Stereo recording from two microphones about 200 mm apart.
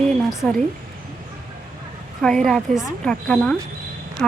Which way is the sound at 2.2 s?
5° left (ahead or behind).